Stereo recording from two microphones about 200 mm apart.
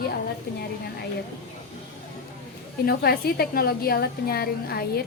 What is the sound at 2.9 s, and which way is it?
A woman's voice, 50° left (ahead or behind).